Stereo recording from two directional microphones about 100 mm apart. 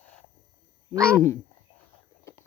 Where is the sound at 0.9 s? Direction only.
30° right (ahead or behind).